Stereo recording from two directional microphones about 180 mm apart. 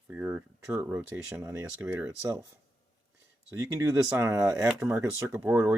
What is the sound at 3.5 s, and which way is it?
Speech, 15° right (ahead or behind).